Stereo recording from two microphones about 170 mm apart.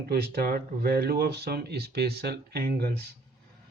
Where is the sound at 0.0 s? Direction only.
70° right (ahead or behind).